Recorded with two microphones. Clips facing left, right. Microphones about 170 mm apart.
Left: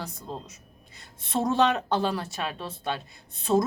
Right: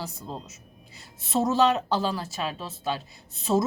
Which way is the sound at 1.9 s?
60° left (ahead or behind).